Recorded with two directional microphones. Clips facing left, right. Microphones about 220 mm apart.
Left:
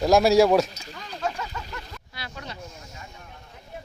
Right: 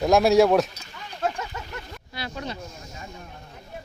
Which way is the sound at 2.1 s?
25° right (ahead or behind).